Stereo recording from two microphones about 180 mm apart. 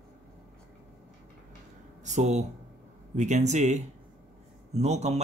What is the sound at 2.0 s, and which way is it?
Speech, 40° right (ahead or behind).